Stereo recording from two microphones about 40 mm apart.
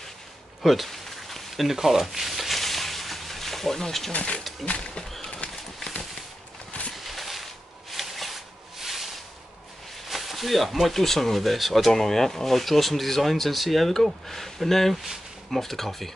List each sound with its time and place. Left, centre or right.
0.6 s a sound: centre
4.1 s speech: left
4.6 s speech: centre
5.4 s horse: left
7.0 s a sound: centre
10.0 s speech: centre